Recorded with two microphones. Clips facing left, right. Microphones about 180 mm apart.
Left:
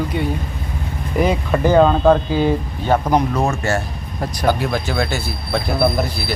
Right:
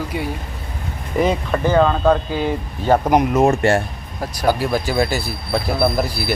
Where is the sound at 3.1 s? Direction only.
15° right (ahead or behind).